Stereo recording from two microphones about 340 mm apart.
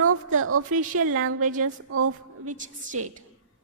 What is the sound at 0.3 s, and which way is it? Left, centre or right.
A woman's voice, right.